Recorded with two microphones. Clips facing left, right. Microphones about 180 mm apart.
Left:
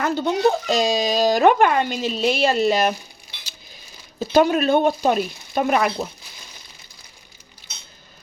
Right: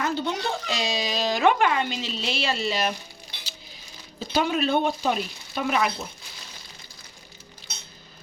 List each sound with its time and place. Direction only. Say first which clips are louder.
0.0 s speech: left 8 dB; 45° left (ahead or behind)
4.2 s speech: left 7 dB; 45° left (ahead or behind)